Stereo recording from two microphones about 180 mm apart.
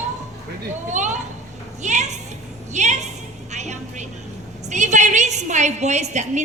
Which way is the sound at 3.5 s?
40° right (ahead or behind).